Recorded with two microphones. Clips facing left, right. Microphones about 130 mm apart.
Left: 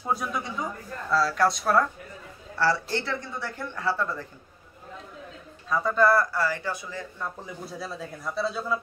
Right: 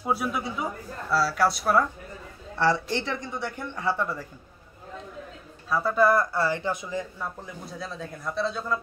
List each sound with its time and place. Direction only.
0.0 s speech: 5° right (ahead or behind)
2.6 s speech: 20° right (ahead or behind)
5.7 s speech: 5° right (ahead or behind)
6.0 s speech: 25° right (ahead or behind)
7.2 s speech: centre (ahead or behind)